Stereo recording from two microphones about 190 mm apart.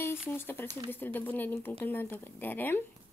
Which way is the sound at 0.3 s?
10° left (ahead or behind).